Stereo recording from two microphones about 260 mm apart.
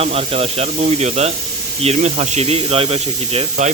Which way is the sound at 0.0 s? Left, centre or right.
Right.